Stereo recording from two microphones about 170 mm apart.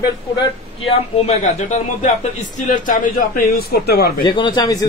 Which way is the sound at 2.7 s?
55° left (ahead or behind).